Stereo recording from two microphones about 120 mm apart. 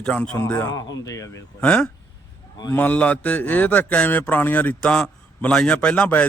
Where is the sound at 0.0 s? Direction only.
10° left (ahead or behind).